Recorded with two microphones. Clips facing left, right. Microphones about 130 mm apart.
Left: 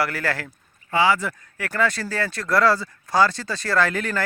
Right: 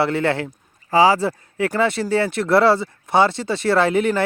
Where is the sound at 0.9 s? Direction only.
35° right (ahead or behind).